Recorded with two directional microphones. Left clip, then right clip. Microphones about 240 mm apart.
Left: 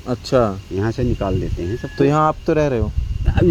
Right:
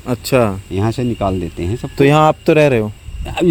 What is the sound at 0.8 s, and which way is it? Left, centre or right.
Speech, right.